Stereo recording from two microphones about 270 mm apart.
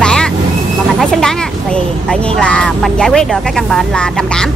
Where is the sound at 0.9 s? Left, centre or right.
Centre.